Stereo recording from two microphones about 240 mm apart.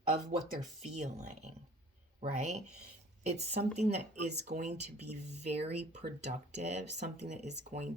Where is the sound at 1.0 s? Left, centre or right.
Right.